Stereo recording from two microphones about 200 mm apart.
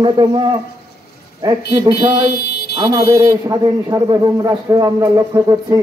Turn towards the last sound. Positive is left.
turn(degrees=-20)  # may be behind; listen again after turning